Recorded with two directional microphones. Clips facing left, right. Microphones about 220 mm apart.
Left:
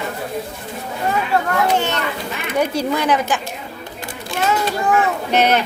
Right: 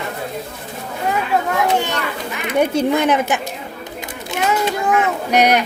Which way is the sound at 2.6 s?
25° right (ahead or behind).